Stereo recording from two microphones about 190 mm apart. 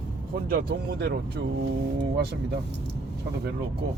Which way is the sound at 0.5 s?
55° right (ahead or behind).